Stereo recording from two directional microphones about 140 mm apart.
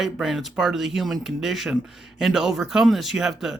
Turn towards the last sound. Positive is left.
turn(degrees=-5)  # may be behind; listen again after turning